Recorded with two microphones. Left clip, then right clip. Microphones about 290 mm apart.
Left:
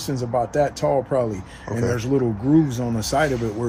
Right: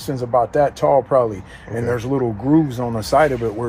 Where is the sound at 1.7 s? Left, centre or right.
Left.